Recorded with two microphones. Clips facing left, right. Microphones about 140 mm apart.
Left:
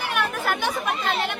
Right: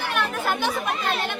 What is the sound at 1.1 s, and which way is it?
Speech, 10° left (ahead or behind).